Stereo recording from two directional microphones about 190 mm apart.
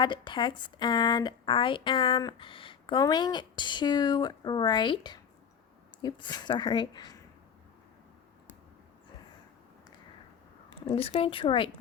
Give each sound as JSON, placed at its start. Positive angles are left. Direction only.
{"t": 0.0, "sound": "a woman's voice", "side_deg": 25}
{"t": 10.8, "sound": "a woman's voice", "side_deg": 30}